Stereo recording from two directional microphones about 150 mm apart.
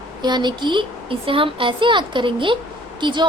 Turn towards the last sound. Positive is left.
turn(degrees=-30)  # may be behind; listen again after turning